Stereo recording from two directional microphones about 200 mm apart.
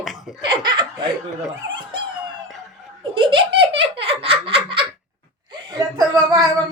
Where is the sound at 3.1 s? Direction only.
25° right (ahead or behind).